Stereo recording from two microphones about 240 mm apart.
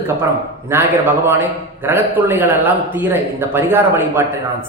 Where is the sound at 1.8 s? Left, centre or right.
Centre.